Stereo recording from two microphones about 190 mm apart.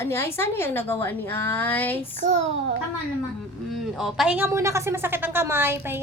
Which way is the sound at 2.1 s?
35° right (ahead or behind).